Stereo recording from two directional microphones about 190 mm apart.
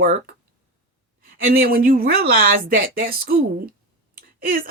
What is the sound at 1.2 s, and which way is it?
Speech, 50° right (ahead or behind).